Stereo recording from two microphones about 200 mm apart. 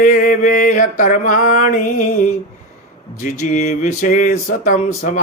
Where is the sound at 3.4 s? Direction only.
40° left (ahead or behind).